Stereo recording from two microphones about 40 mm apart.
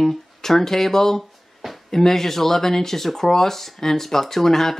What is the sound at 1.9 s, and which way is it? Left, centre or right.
Speech, centre.